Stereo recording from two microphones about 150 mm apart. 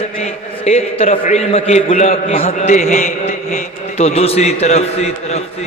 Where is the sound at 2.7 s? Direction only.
55° left (ahead or behind).